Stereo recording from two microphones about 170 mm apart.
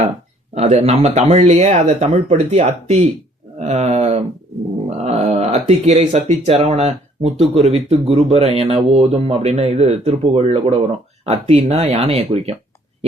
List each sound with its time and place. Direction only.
0.5 s speech: 40° right (ahead or behind)